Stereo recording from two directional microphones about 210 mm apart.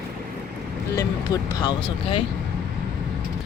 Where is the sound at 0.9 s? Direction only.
15° left (ahead or behind).